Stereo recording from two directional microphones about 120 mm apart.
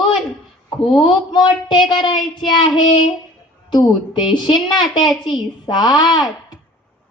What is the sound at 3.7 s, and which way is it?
A child's voice, 35° left (ahead or behind).